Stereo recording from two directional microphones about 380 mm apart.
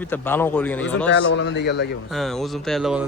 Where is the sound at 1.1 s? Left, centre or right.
Left.